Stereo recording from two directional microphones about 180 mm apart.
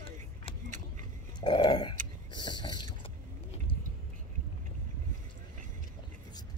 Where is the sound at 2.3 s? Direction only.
25° left (ahead or behind).